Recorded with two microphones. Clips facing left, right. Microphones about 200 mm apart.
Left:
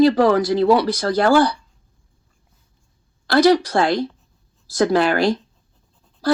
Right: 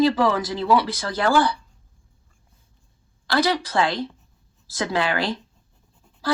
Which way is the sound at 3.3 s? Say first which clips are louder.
Left 7 dB; 40° left (ahead or behind).